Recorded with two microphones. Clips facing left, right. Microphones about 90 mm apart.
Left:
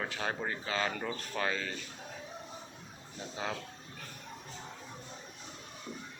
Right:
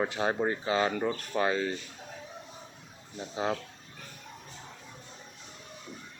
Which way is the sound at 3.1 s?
20° right (ahead or behind).